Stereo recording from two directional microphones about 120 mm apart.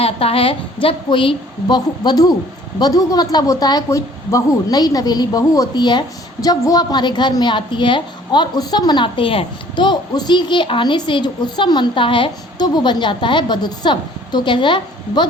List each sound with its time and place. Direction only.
0.0 s a woman's voice: 55° left (ahead or behind)